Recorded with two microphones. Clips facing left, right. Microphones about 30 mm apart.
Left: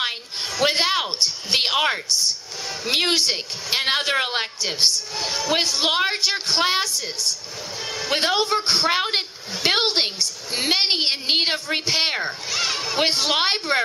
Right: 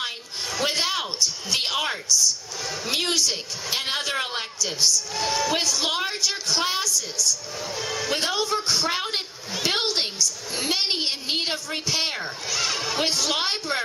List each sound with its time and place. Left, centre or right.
0.6 s a sound: left
1.2 s a woman's voice: left
5.1 s a woman's voice: left
7.9 s music: left
8.1 s a woman's voice: left
8.9 s a woman's voice: left
13.0 s a woman's voice: left